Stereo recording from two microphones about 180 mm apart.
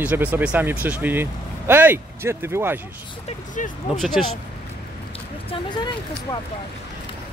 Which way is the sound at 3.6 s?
45° left (ahead or behind).